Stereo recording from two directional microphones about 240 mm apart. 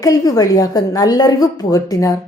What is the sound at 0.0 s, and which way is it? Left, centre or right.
A woman's voice, centre.